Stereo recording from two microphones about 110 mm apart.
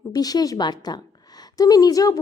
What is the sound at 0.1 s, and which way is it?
A woman's voice, 35° left (ahead or behind).